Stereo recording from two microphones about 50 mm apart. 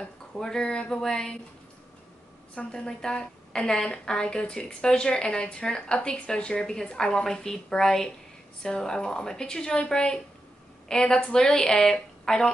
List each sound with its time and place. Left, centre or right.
0.4 s a woman's voice: centre
2.7 s a woman's voice: centre